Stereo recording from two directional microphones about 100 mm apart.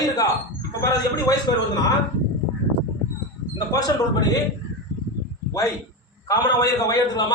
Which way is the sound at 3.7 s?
40° left (ahead or behind).